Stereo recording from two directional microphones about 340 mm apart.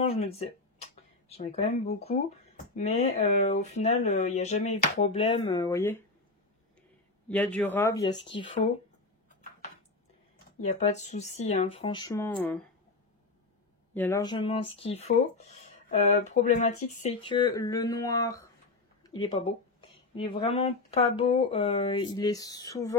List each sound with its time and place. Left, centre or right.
0.0 s speech: centre
7.2 s speech: centre
10.6 s speech: centre
13.9 s speech: centre
20.2 s speech: centre